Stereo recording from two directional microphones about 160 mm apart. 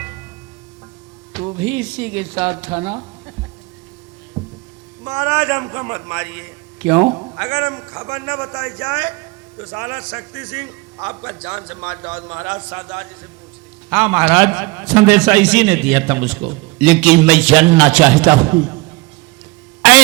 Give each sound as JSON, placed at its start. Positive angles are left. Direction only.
{"t": 1.3, "sound": "a man's voice", "side_deg": -10}
{"t": 4.4, "sound": "a sound", "side_deg": -25}
{"t": 5.0, "sound": "a man's voice", "side_deg": -5}